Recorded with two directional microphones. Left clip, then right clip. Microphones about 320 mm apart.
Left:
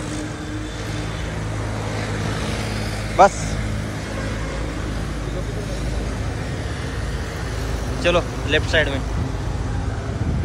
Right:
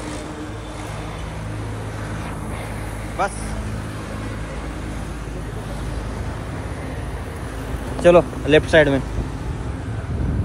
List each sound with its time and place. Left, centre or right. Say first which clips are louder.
3.2 s speech: left 10 dB; centre
8.0 s speech: right 7 dB; centre